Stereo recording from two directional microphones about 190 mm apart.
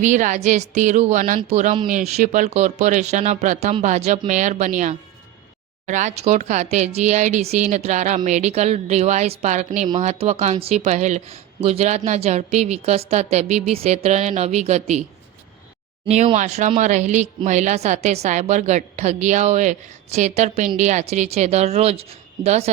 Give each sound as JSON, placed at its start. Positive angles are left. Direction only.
{"t": 0.0, "sound": "speech", "side_deg": -40}
{"t": 16.0, "sound": "speech", "side_deg": -35}